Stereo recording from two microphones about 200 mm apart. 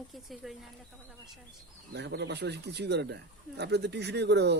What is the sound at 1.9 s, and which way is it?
Speech, 60° right (ahead or behind).